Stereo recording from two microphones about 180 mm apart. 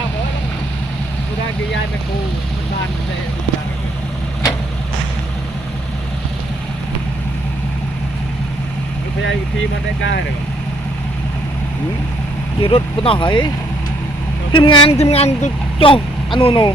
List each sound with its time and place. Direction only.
10.0 s speech: 90° left
12.6 s speech: 30° left (ahead or behind)
14.5 s speech: 25° left (ahead or behind)